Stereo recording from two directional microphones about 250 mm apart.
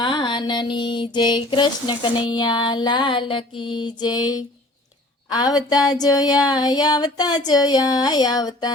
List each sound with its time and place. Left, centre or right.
0.0 s child singing: centre